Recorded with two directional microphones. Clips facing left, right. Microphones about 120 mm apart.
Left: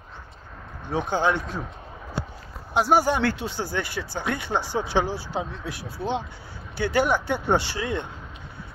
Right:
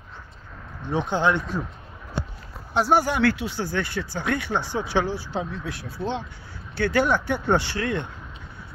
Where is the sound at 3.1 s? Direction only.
25° left (ahead or behind).